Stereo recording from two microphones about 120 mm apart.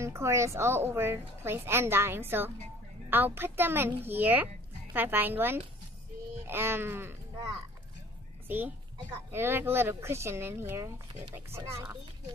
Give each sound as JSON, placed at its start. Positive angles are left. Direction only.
{"t": 0.0, "sound": "a woman's voice", "side_deg": -25}
{"t": 8.5, "sound": "a child's voice", "side_deg": -15}